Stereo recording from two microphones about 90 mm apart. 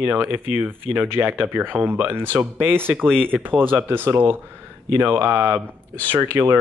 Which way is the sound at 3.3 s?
20° right (ahead or behind).